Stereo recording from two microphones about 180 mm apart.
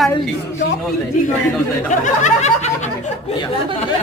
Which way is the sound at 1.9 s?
40° left (ahead or behind).